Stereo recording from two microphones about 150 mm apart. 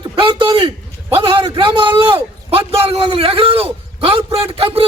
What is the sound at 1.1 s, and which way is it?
A man's voice, 35° right (ahead or behind).